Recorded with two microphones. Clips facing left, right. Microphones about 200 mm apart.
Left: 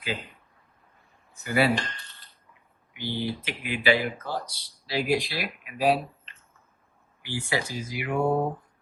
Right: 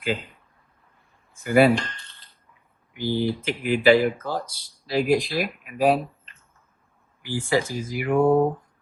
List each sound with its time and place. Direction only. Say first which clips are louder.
1.4 s speech: right 7 dB; 50° right (ahead or behind)
2.9 s speech: right 6 dB; 45° right (ahead or behind)
7.2 s speech: right 6 dB; 45° right (ahead or behind)